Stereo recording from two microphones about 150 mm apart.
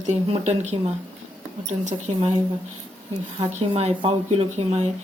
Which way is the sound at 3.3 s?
40° right (ahead or behind).